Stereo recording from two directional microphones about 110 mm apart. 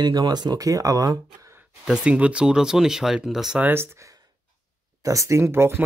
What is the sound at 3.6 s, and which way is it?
Speech, 20° right (ahead or behind).